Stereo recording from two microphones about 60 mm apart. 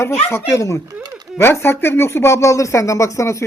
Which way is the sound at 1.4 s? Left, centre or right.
Left.